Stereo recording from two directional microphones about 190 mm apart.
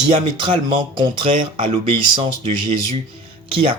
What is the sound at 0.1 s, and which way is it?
Speech, 25° right (ahead or behind).